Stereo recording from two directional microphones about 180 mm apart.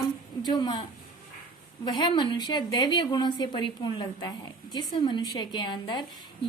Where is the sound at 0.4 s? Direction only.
25° left (ahead or behind).